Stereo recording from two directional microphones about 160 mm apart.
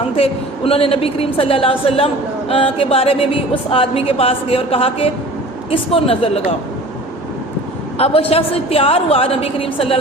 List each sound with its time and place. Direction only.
0.2 s a woman's voice: 35° left (ahead or behind)
7.9 s a woman's voice: 35° left (ahead or behind)